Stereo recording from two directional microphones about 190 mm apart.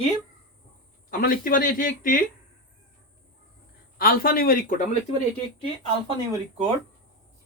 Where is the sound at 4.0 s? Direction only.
50° left (ahead or behind).